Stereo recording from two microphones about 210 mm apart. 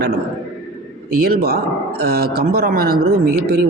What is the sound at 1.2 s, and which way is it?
Speech, 45° right (ahead or behind).